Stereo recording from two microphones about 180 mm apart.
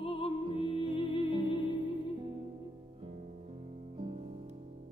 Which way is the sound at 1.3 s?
30° right (ahead or behind).